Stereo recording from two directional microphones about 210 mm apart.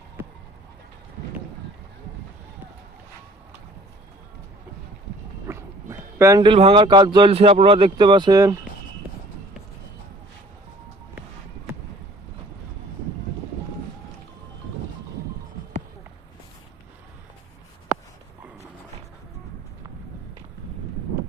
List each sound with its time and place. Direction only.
5.5 s speech: 10° right (ahead or behind)